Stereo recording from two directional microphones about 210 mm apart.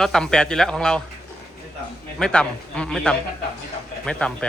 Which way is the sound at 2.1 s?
5° left (ahead or behind).